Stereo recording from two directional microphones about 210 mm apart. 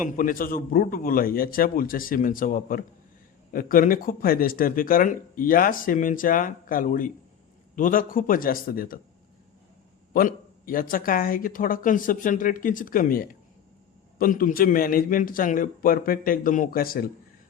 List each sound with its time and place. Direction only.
0.0 s a man's voice: 40° left (ahead or behind)
10.1 s a man's voice: 40° left (ahead or behind)